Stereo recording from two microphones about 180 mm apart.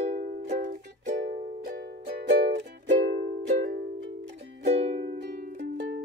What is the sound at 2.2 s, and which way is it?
Music, 70° right (ahead or behind).